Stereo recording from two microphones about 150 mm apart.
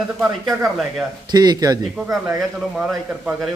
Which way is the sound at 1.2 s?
25° right (ahead or behind).